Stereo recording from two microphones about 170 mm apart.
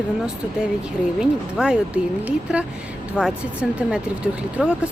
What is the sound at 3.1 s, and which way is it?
Speech, 5° right (ahead or behind).